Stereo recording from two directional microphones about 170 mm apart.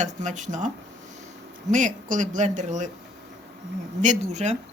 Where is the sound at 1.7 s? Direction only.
50° right (ahead or behind).